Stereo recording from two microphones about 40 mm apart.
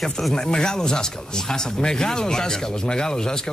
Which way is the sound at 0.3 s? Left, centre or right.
Centre.